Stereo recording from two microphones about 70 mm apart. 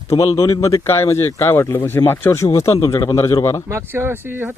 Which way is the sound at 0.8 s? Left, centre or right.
Left.